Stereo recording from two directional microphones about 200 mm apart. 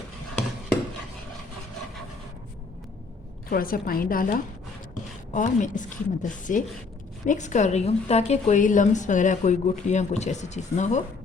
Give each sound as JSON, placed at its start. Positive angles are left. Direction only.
{"t": 3.5, "sound": "a woman's voice", "side_deg": 45}